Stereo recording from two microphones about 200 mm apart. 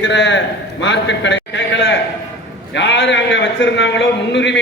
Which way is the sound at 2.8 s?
65° left (ahead or behind).